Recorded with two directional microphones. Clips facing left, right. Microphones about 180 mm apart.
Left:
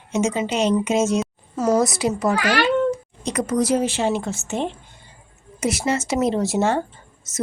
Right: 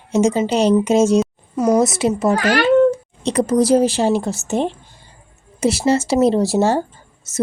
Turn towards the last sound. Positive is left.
turn(degrees=-30)  # may be behind; listen again after turning